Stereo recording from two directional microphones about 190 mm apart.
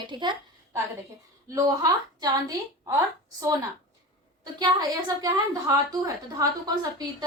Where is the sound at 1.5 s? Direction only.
20° right (ahead or behind).